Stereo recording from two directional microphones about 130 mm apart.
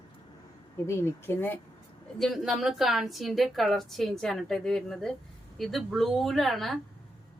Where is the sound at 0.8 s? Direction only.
15° left (ahead or behind).